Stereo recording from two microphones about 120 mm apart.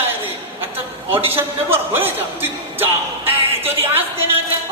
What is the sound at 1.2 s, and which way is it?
A woman's voice, 20° right (ahead or behind).